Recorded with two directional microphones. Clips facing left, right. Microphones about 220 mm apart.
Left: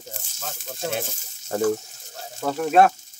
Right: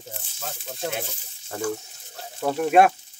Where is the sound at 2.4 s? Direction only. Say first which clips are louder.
Even; 10° right (ahead or behind).